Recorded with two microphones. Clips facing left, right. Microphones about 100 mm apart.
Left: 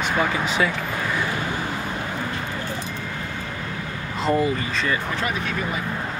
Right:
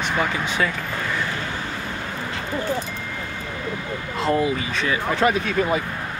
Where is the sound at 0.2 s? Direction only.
10° left (ahead or behind).